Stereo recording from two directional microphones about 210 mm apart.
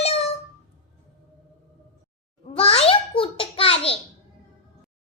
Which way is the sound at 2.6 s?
25° left (ahead or behind).